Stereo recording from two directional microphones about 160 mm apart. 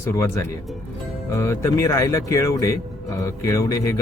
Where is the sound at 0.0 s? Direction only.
20° left (ahead or behind).